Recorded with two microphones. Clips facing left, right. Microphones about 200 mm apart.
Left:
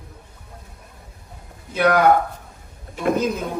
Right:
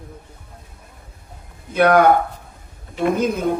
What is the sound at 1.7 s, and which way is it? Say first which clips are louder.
Speech: right 4 dB; 55° right (ahead or behind).